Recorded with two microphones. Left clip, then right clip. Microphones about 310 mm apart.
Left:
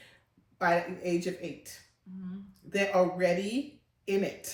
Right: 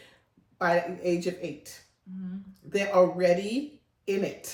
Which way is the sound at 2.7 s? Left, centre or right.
Centre.